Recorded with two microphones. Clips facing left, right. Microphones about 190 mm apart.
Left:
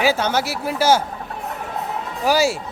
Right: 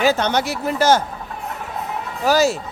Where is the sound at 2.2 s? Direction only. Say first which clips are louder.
Right 2 dB; 10° left (ahead or behind).